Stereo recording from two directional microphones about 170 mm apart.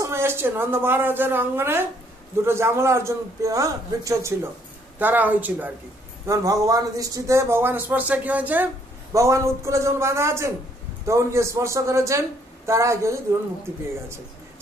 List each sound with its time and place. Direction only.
0.0 s a woman's voice: 15° right (ahead or behind)